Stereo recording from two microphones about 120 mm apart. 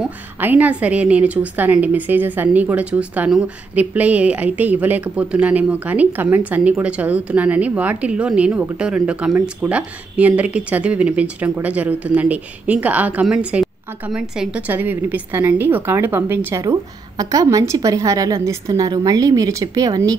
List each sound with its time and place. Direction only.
0.4 s a woman's voice: 15° right (ahead or behind); by 20.2 s 30° right (ahead or behind)